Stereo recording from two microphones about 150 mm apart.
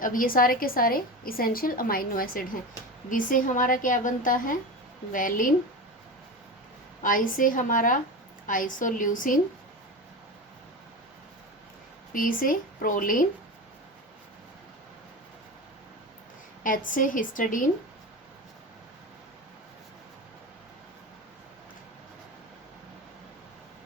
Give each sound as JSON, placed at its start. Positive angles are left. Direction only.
{"t": 0.0, "sound": "a woman's voice", "side_deg": 65}
{"t": 7.0, "sound": "a woman's voice", "side_deg": 65}
{"t": 12.1, "sound": "a woman's voice", "side_deg": 65}
{"t": 16.6, "sound": "a woman's voice", "side_deg": 65}